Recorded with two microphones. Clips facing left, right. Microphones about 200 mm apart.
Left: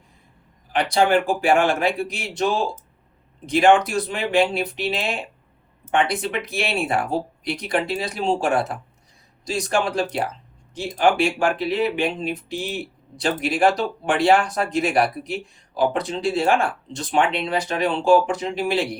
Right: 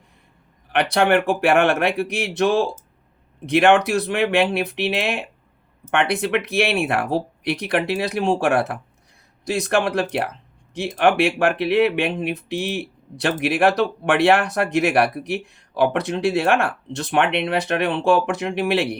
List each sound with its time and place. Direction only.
0.7 s speech: 65° right (ahead or behind)